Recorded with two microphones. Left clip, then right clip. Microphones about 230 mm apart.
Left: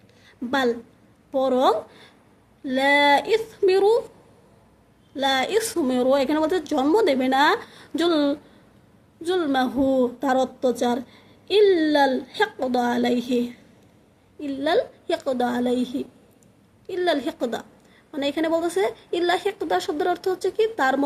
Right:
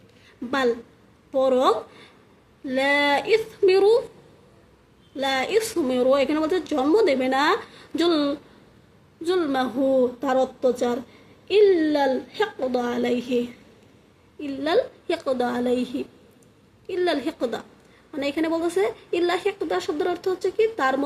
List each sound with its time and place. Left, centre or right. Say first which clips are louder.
0.5 s a woman's voice: even; centre
5.1 s a woman's voice: left 1 dB; centre